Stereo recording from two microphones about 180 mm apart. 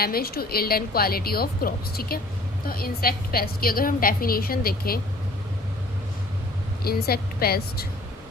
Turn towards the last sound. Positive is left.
turn(degrees=60)  # may be behind; listen again after turning